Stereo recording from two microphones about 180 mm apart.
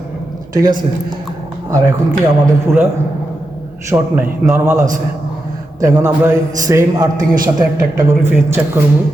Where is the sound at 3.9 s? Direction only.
15° right (ahead or behind).